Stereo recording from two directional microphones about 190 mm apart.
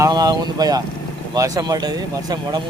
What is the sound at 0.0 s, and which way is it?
Speech, 20° right (ahead or behind).